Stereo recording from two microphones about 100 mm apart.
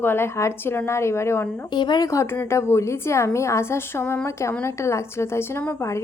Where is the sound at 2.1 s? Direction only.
30° left (ahead or behind).